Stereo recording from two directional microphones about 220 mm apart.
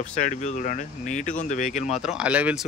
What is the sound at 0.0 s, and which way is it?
Speech, 35° left (ahead or behind).